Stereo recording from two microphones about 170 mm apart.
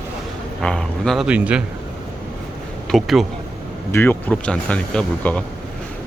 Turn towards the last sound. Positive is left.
turn(degrees=10)  # may be behind; listen again after turning